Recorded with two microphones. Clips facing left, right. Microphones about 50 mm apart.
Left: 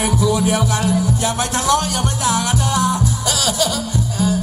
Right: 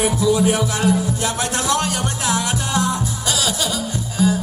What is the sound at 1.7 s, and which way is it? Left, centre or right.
Music, right.